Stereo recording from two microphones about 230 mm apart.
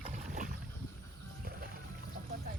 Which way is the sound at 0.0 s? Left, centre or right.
Right.